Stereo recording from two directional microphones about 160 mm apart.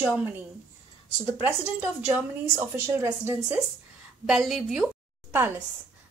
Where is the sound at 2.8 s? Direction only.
15° right (ahead or behind).